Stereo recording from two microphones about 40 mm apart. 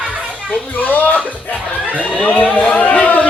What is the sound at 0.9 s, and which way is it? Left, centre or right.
Speech, left.